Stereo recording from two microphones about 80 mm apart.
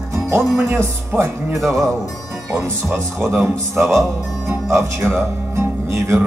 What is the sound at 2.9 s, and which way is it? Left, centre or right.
Speech, right.